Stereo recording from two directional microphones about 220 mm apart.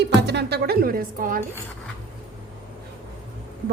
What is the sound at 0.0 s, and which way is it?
Speech, 50° right (ahead or behind).